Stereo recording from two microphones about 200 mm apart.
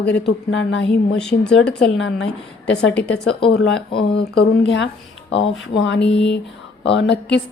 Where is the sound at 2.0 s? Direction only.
65° left (ahead or behind).